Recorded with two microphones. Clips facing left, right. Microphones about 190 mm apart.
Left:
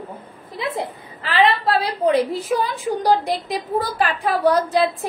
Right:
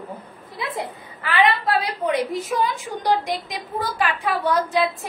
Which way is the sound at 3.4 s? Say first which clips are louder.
Left 5 dB; 35° left (ahead or behind).